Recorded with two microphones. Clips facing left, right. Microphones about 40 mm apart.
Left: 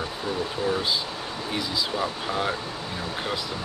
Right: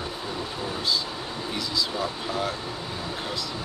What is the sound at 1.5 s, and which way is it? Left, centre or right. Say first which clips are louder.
Speech: left 1 dB; centre.